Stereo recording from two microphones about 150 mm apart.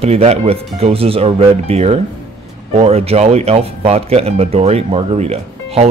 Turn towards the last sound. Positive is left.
turn(degrees=-45)  # may be behind; listen again after turning